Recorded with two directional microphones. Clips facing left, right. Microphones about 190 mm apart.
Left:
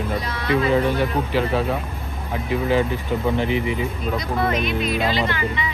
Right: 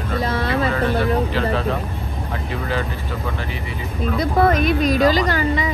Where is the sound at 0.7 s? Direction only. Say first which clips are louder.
Right 1 dB; 15° left (ahead or behind).